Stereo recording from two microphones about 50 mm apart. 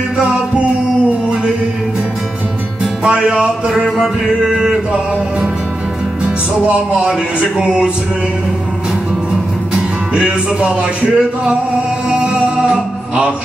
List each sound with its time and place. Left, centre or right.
2.8 s music: centre
6.2 s music: right
9.3 s music: centre